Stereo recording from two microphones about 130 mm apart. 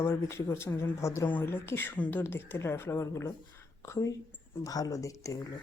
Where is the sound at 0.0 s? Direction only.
20° left (ahead or behind).